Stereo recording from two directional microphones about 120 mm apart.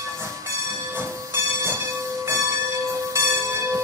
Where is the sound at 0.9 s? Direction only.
20° right (ahead or behind).